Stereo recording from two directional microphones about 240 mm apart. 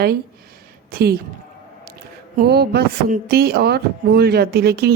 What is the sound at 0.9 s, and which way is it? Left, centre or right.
Speech, right.